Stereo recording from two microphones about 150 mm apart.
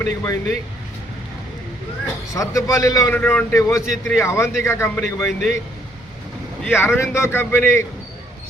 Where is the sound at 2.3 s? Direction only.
20° left (ahead or behind).